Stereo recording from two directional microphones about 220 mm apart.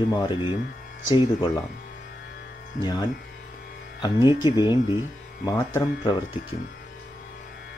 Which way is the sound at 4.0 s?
20° left (ahead or behind).